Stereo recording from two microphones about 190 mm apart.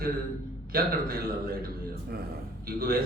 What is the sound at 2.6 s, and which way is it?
Speech, 50° right (ahead or behind).